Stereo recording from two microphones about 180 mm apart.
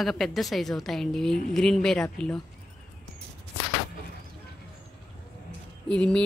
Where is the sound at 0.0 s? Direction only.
Centre (ahead or behind).